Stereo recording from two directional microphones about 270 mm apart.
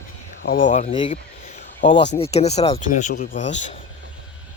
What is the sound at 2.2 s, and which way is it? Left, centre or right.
A man's voice, left.